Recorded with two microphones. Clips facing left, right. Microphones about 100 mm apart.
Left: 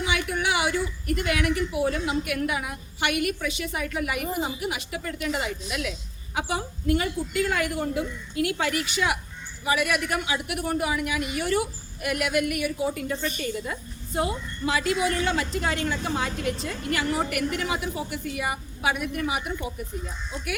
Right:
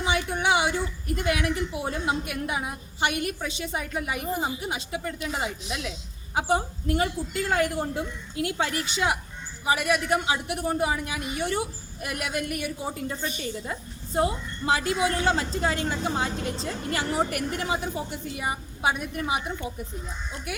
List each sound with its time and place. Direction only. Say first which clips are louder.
0.0 s a woman's voice: right 1 dB; 30° right (ahead or behind)
13.2 s a woman's voice: left 2 dB; 50° left (ahead or behind)
13.7 s a woman's voice: left 1 dB; 30° right (ahead or behind)